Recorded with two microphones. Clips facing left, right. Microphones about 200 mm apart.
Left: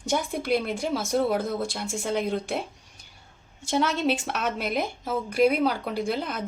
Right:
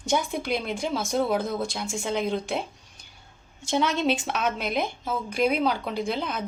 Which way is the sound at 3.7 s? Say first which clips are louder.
Even; 5° left (ahead or behind).